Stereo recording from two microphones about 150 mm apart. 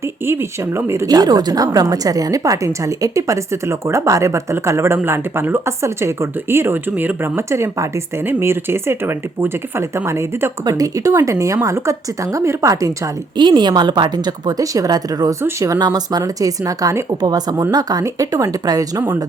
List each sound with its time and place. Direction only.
0.3 s a woman's voice: 20° right (ahead or behind)
13.3 s a woman's voice: 30° right (ahead or behind)